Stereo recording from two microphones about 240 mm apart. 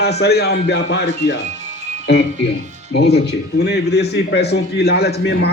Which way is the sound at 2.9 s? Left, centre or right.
Left.